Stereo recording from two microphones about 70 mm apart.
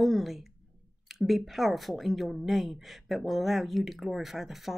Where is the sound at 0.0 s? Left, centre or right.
Centre.